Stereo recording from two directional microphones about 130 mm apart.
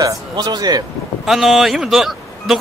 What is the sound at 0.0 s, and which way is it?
Speech, 30° right (ahead or behind).